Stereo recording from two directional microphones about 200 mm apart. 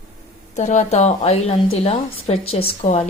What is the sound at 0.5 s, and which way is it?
Speech, 35° left (ahead or behind).